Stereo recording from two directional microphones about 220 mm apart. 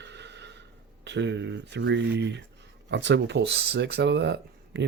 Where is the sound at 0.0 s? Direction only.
50° right (ahead or behind).